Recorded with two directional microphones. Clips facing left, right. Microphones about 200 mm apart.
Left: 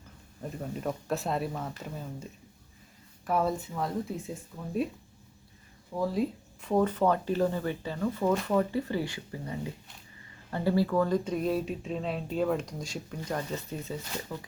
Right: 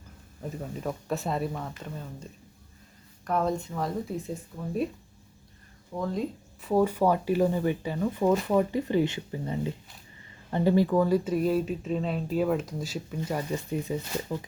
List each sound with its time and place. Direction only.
0.6 s speech: centre (ahead or behind)
3.2 s speech: 5° left (ahead or behind)
4.5 s speech: 20° right (ahead or behind)
6.0 s speech: 5° left (ahead or behind)
6.7 s speech: 10° right (ahead or behind)